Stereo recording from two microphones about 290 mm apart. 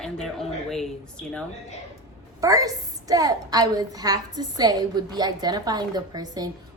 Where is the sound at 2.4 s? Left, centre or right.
Centre.